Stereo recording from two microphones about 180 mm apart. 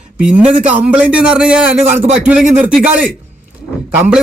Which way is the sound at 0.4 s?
40° right (ahead or behind).